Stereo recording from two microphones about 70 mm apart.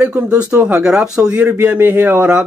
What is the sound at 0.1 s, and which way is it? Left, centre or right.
Speech, centre.